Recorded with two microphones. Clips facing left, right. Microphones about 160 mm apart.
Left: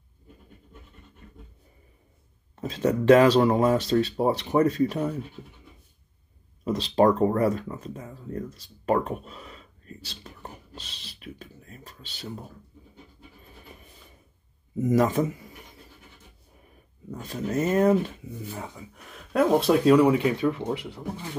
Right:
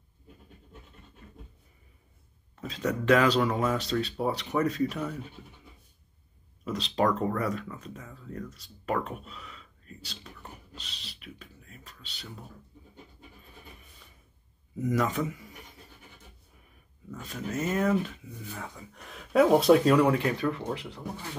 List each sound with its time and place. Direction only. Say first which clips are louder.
2.6 s speech: left 6 dB; 40° left (ahead or behind)
6.6 s speech: left 6 dB; 35° left (ahead or behind)
10.4 s beatboxing: left 4 dB; 40° left (ahead or behind)
14.8 s speech: left 6 dB; 40° left (ahead or behind)
17.1 s speech: left 6 dB; 35° left (ahead or behind)
19.0 s speech: right 1 dB; centre (ahead or behind)